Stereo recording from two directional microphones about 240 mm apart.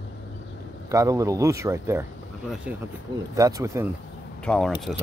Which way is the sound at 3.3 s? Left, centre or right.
Centre.